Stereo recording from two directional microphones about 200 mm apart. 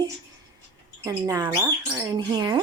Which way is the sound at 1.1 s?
15° right (ahead or behind).